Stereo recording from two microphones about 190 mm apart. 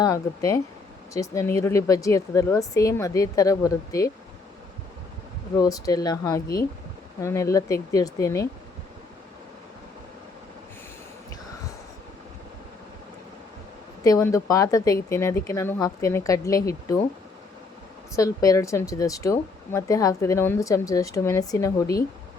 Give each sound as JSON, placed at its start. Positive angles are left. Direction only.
{"t": 0.0, "sound": "speech", "side_deg": 20}
{"t": 5.5, "sound": "speech", "side_deg": 20}
{"t": 14.0, "sound": "speech", "side_deg": 15}
{"t": 18.1, "sound": "speech", "side_deg": 15}